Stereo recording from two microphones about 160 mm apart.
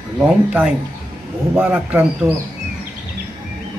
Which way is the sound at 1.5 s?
10° right (ahead or behind).